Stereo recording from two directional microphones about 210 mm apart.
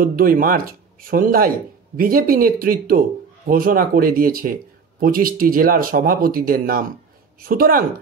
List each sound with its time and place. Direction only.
0.0 s speech: 45° right (ahead or behind)